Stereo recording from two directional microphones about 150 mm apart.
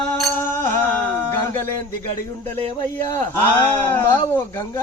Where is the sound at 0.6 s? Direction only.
15° left (ahead or behind).